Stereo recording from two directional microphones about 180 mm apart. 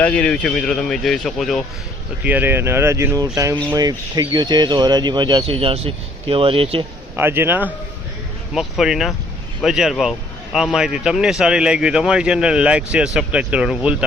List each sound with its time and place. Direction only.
0.0 s speech: 5° left (ahead or behind)
2.2 s speech: 10° right (ahead or behind); by 6.8 s 30° right (ahead or behind)
7.2 s speech: 10° right (ahead or behind)